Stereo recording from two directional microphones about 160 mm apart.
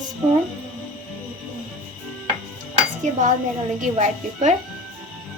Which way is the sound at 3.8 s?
50° right (ahead or behind).